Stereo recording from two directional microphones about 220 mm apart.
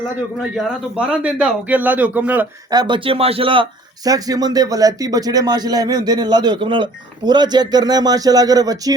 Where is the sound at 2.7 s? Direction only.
20° right (ahead or behind).